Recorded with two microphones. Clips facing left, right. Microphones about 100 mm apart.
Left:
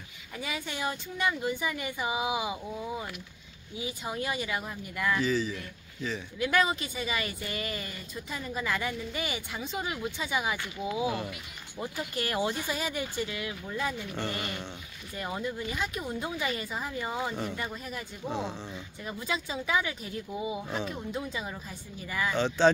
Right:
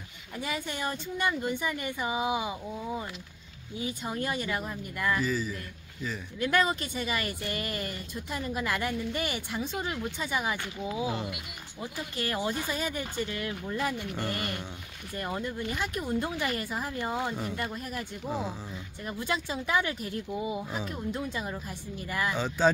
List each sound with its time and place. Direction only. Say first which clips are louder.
0.4 s speech: right 1 dB; 5° left (ahead or behind)
4.0 s speech: even; 5° left (ahead or behind)
9.8 s speech: even; 10° left (ahead or behind)
11.1 s speech: left 1 dB; 15° right (ahead or behind)
11.8 s speech: left 1 dB; 20° left (ahead or behind); by 22.7 s 5° right (ahead or behind)